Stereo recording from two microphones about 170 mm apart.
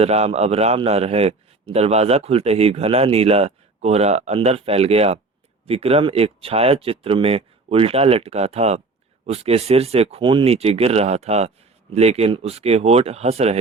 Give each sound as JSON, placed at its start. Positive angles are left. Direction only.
{"t": 0.0, "sound": "a man's voice", "side_deg": -35}